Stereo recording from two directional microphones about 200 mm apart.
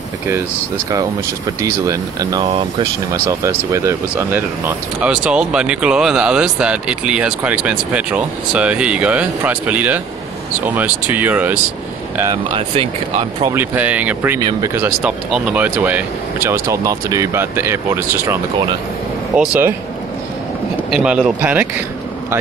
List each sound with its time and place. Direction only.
1.6 s speech: 15° right (ahead or behind)
12.5 s speech: 30° right (ahead or behind)
13.5 s speech: 10° right (ahead or behind)
15.0 s speech: 5° right (ahead or behind)
20.9 s speech: 5° right (ahead or behind)